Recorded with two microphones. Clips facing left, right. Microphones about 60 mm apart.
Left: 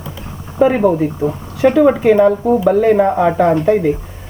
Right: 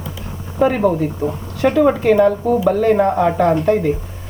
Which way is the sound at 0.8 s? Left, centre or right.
Centre.